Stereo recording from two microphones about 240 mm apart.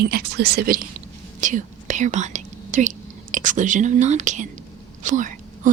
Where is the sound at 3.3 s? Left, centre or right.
Right.